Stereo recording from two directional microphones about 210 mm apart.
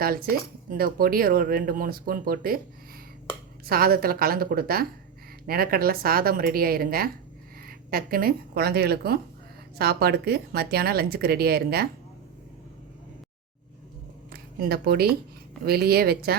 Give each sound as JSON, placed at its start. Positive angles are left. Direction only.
{"t": 0.0, "sound": "speech", "side_deg": -45}
{"t": 3.7, "sound": "speech", "side_deg": -45}
{"t": 14.3, "sound": "a sound", "side_deg": -50}
{"t": 15.6, "sound": "speech", "side_deg": -50}